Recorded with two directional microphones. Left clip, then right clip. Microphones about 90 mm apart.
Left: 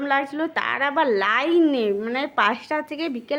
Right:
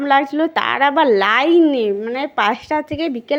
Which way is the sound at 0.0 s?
45° right (ahead or behind).